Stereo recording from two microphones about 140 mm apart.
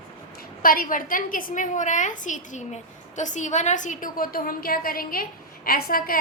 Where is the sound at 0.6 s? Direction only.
85° left.